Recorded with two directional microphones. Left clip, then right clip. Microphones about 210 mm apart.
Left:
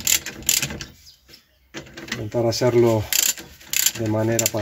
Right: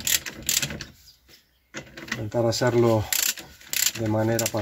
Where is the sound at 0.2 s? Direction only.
Centre (ahead or behind).